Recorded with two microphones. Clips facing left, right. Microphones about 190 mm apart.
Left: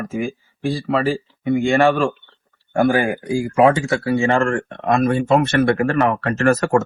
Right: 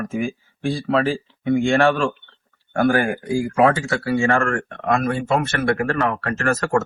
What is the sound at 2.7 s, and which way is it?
Speech, 20° left (ahead or behind).